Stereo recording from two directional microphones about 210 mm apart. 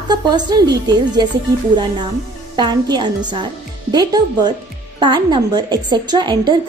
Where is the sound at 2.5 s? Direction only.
20° right (ahead or behind).